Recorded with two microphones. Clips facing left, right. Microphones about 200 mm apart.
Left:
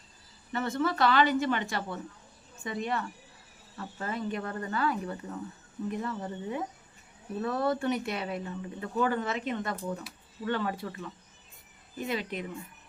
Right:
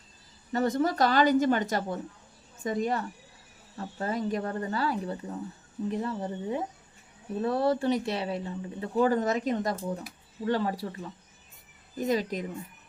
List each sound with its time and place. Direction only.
0.8 s speech: 40° right (ahead or behind)